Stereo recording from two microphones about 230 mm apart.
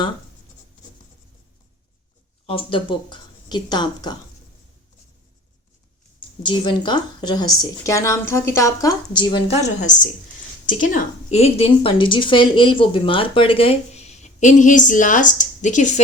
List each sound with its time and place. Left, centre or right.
2.5 s a woman's voice: left
6.4 s a woman's voice: left
9.6 s a woman's voice: left